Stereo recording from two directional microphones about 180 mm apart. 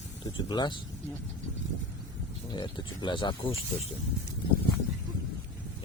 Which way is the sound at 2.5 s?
25° left (ahead or behind).